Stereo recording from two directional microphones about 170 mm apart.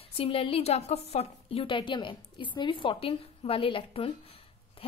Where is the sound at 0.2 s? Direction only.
35° left (ahead or behind).